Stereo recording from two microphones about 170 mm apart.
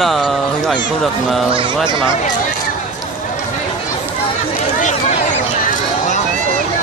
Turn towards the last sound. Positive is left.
turn(degrees=45)  # may be behind; listen again after turning